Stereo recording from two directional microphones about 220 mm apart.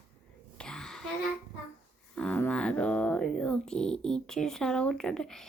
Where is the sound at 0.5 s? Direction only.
5° left (ahead or behind).